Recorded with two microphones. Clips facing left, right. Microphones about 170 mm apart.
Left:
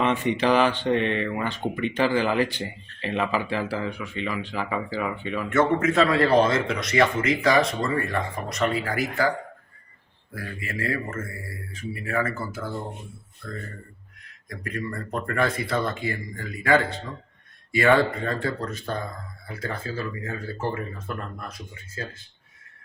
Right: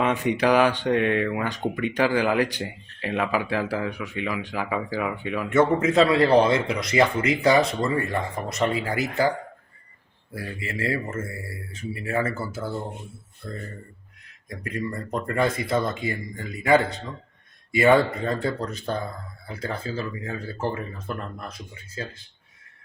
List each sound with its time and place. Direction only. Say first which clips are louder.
0.0 s speech: right 1 dB; 10° right (ahead or behind)
10.3 s speech: right 1 dB; 25° right (ahead or behind)